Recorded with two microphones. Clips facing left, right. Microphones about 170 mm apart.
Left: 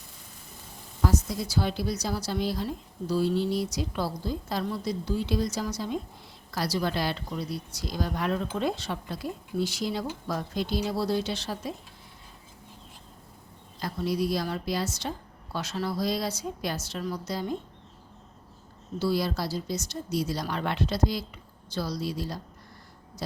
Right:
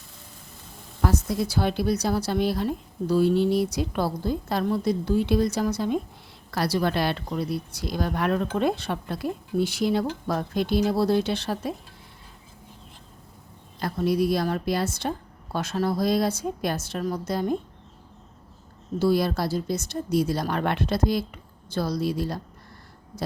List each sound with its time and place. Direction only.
1.0 s speech: 60° right (ahead or behind)
13.7 s a woman's voice: 60° right (ahead or behind)
18.9 s speech: 55° right (ahead or behind)